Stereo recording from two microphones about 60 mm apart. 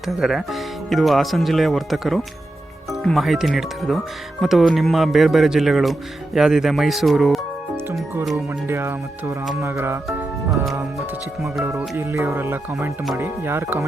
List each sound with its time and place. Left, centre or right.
0.2 s speech: centre
8.6 s speech: right
11.9 s speech: right